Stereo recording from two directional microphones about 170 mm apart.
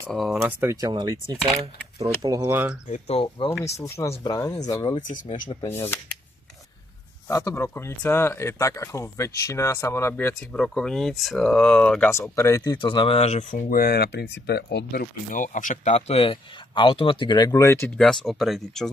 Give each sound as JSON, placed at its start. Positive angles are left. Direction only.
{"t": 0.1, "sound": "speech", "side_deg": 0}
{"t": 0.6, "sound": "speech", "side_deg": -20}
{"t": 2.9, "sound": "speech", "side_deg": 35}
{"t": 3.6, "sound": "speech", "side_deg": 15}
{"t": 5.0, "sound": "speech", "side_deg": 50}
{"t": 5.5, "sound": "speech", "side_deg": 30}
{"t": 7.2, "sound": "speech", "side_deg": 20}
{"t": 12.8, "sound": "speech", "side_deg": 30}
{"t": 17.9, "sound": "speech", "side_deg": 0}